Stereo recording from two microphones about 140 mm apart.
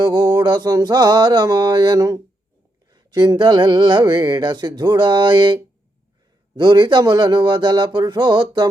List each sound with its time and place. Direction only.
0.0 s speech: 30° right (ahead or behind)
6.6 s speech: 35° right (ahead or behind)